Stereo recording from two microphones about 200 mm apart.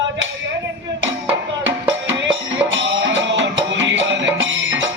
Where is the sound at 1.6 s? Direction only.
70° right (ahead or behind).